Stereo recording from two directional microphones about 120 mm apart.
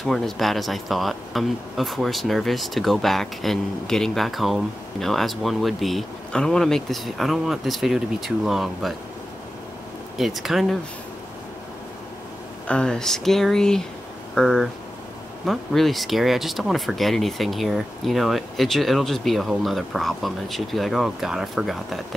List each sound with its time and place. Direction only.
0.0 s speech: 5° left (ahead or behind)
10.1 s speech: centre (ahead or behind)
12.6 s speech: 10° left (ahead or behind)